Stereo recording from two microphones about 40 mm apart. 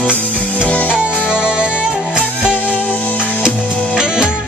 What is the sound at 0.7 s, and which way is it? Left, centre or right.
Music, left.